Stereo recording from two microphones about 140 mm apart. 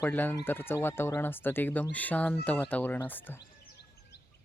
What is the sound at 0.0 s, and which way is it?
Speech, 15° left (ahead or behind).